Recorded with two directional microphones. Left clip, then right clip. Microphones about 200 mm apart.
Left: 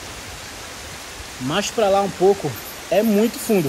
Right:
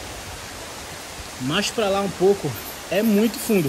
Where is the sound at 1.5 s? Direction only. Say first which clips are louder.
Left 4 dB; centre (ahead or behind).